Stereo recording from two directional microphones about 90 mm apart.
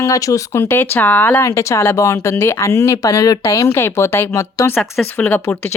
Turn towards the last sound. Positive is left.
turn(degrees=20)  # may be behind; listen again after turning